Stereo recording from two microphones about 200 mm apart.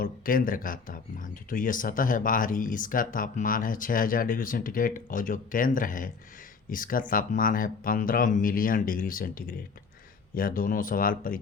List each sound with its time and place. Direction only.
0.0 s speech: 45° left (ahead or behind)